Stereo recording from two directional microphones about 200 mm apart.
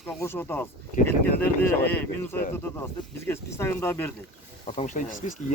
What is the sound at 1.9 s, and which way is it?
Speech, 10° left (ahead or behind).